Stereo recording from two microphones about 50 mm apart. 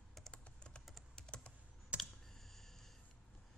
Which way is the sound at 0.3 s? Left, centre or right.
Centre.